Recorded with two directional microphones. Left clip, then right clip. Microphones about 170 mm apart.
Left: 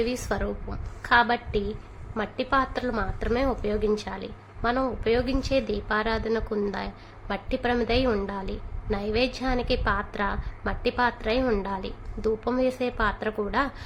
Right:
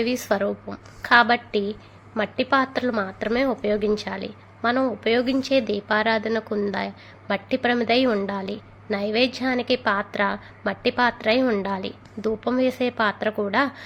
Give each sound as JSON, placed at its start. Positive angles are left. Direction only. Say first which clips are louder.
{"t": 0.0, "sound": "a woman's voice", "louder": "right 5 dB", "side_deg": -20}